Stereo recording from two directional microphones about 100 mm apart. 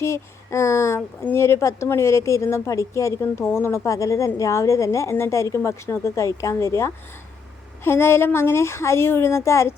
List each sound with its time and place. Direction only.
0.0 s a woman's voice: 30° left (ahead or behind)